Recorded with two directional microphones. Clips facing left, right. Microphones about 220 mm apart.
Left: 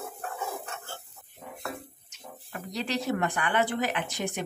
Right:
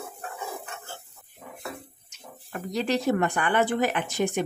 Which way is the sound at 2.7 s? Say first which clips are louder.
Right 5 dB; 50° right (ahead or behind).